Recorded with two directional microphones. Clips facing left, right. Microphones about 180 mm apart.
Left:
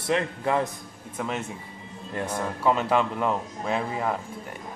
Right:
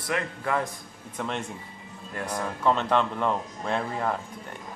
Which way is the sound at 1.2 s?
5° left (ahead or behind).